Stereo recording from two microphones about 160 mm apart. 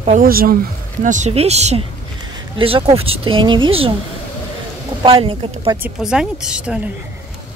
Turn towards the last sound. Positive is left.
turn(degrees=-5)  # may be behind; listen again after turning